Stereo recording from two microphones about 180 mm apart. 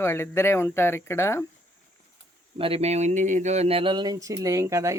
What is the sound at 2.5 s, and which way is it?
Speech, 30° right (ahead or behind).